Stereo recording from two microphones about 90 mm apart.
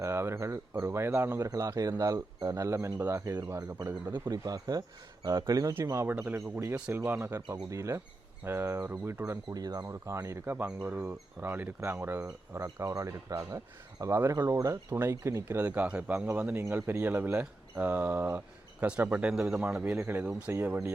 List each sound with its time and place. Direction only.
0.0 s speech: 30° right (ahead or behind)
1.4 s speech: 40° right (ahead or behind)
4.1 s speech: 45° right (ahead or behind)
6.1 s speech: 25° right (ahead or behind)
7.5 s speech: 35° right (ahead or behind)
9.2 s speech: 40° right (ahead or behind)
10.4 s speech: 20° right (ahead or behind)
12.5 s speech: 35° right (ahead or behind)
14.8 s speech: 25° right (ahead or behind)
15.1 s speech: 35° right (ahead or behind)
15.5 s speech: 20° right (ahead or behind)
15.9 s speech: 10° right (ahead or behind)
16.6 s speech: 25° right (ahead or behind); by 20.0 s 10° right (ahead or behind)
20.0 s speech: 20° right (ahead or behind)